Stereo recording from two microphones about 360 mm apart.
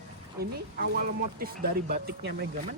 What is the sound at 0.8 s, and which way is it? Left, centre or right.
Speech, right.